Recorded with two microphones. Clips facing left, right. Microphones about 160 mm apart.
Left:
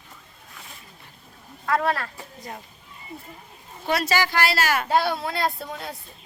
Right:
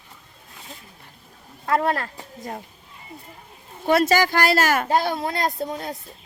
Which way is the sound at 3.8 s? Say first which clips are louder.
Right 5 dB; 50° right (ahead or behind).